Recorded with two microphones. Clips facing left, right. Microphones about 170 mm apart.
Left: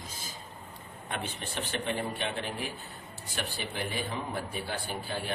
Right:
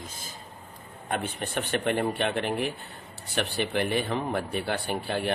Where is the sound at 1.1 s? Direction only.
55° right (ahead or behind).